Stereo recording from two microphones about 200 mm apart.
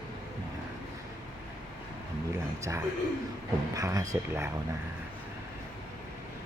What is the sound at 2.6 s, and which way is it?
A man's voice, 15° right (ahead or behind).